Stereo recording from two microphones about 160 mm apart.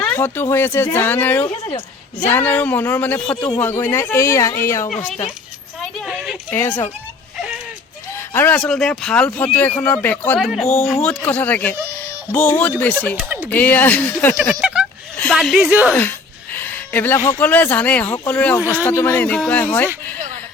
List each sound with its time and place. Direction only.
0.0 s speech: 10° left (ahead or behind)
6.0 s a sound: centre (ahead or behind)
6.5 s speech: 15° left (ahead or behind)
8.1 s speech: 15° left (ahead or behind)
10.4 s a woman's voice: centre (ahead or behind)
13.2 s speech: 10° right (ahead or behind)
13.5 s speech: 10° left (ahead or behind)
14.6 s a sound: 5° right (ahead or behind)
15.2 s a woman's voice: 5° left (ahead or behind)
16.0 s speech: 10° left (ahead or behind)
18.6 s speech: 10° right (ahead or behind)
18.9 s speech: 15° left (ahead or behind)